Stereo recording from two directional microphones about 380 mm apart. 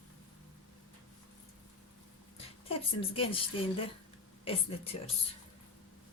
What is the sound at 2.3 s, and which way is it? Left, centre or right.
Speech, centre.